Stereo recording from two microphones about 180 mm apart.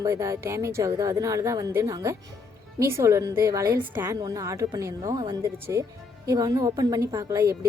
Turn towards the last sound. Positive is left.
turn(degrees=-20)  # may be behind; listen again after turning